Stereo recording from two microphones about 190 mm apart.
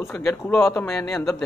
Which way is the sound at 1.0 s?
5° left (ahead or behind).